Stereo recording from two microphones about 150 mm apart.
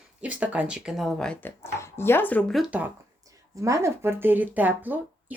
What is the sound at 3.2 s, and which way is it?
Speech, 20° right (ahead or behind).